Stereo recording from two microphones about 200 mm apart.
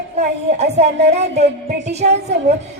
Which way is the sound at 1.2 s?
35° right (ahead or behind).